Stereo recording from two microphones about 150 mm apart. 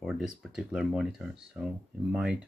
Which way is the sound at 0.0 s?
Centre (ahead or behind).